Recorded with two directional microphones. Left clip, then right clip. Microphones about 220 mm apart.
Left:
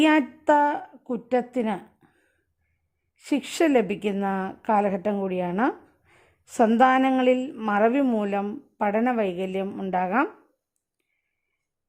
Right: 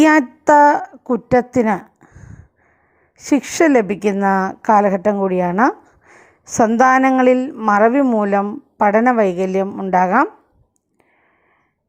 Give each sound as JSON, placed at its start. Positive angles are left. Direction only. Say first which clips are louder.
{"t": 0.0, "sound": "a woman's voice", "louder": "right 8 dB", "side_deg": -15}
{"t": 3.3, "sound": "a woman's voice", "louder": "right 8 dB", "side_deg": -15}